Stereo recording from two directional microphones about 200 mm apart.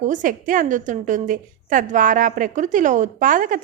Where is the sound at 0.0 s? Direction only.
40° right (ahead or behind).